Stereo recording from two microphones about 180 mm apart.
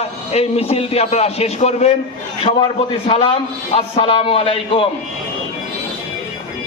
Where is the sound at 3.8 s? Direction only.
30° left (ahead or behind).